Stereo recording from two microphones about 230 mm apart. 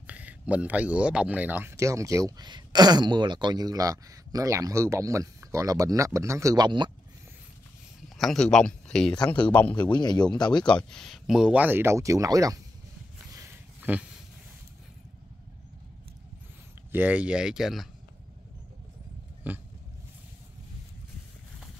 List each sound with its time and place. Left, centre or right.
0.0 s speech: centre
8.2 s speech: centre
9.8 s speech: centre
10.6 s speech: centre
13.9 s speech: centre
16.9 s speech: centre
19.4 s a sound: centre